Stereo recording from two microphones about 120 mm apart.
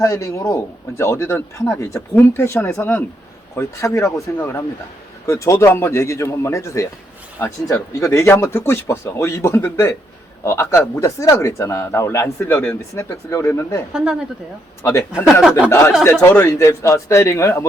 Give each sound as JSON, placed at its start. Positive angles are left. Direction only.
{"t": 0.0, "sound": "speech", "side_deg": 25}
{"t": 13.9, "sound": "speech", "side_deg": -5}
{"t": 15.7, "sound": "speech", "side_deg": 20}